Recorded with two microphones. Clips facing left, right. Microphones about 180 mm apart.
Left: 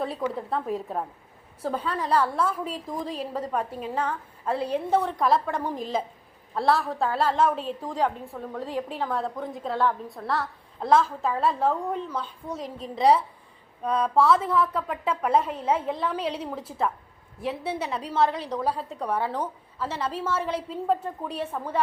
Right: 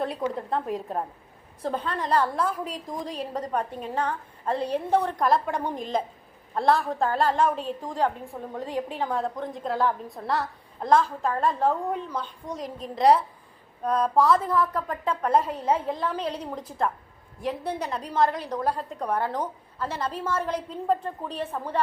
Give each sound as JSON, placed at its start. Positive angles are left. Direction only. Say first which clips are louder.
{"t": 0.3, "sound": "a woman's voice", "louder": "even", "side_deg": 5}
{"t": 12.2, "sound": "a woman's voice", "louder": "even", "side_deg": 5}
{"t": 18.3, "sound": "a woman's voice", "louder": "even", "side_deg": -10}
{"t": 18.6, "sound": "a woman's voice", "louder": "right 1 dB", "side_deg": 5}